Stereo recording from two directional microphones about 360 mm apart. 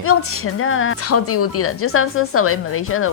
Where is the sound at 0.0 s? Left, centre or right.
Left.